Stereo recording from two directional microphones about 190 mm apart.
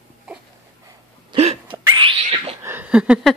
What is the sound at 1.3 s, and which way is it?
Hiccup, 30° right (ahead or behind).